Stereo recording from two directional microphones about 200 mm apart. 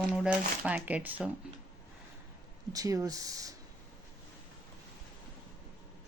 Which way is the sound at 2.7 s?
15° right (ahead or behind).